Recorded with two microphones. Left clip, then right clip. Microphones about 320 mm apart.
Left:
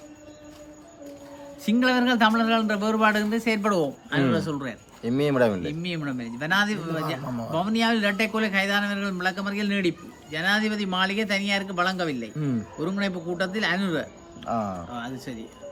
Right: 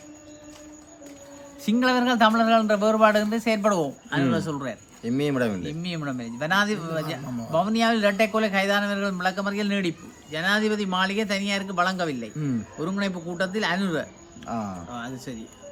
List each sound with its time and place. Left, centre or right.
1.6 s speech: centre
5.0 s speech: centre
5.6 s speech: centre
14.4 s speech: centre
14.8 s speech: centre